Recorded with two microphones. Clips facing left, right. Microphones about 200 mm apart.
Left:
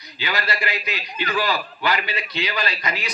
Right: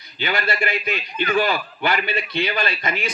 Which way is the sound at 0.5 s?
50° right (ahead or behind).